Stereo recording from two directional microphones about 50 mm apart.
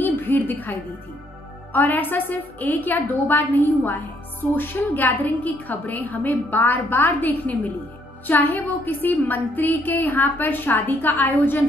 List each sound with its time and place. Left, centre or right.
0.0 s music: left
1.7 s a woman's voice: left